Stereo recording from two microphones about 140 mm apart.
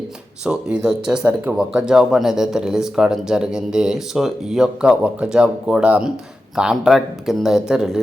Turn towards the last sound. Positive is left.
turn(degrees=-5)  # may be behind; listen again after turning